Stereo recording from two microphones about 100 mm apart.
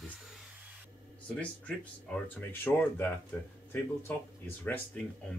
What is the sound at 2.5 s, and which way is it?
Speech, 20° left (ahead or behind).